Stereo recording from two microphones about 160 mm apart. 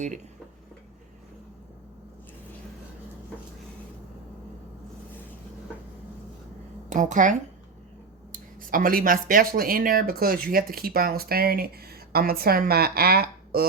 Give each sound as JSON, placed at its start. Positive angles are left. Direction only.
{"t": 6.9, "sound": "speech", "side_deg": -50}